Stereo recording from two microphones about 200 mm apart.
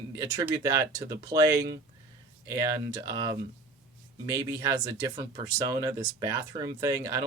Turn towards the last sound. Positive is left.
turn(degrees=-15)  # may be behind; listen again after turning